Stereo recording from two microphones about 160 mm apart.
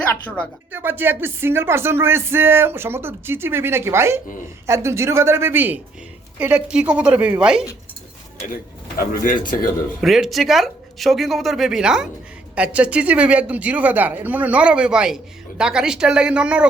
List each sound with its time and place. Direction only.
0.7 s speech: 10° right (ahead or behind)
9.0 s speech: 60° left (ahead or behind)
10.0 s speech: centre (ahead or behind)